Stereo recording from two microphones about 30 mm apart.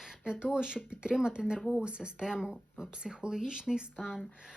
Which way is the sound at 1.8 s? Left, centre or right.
Right.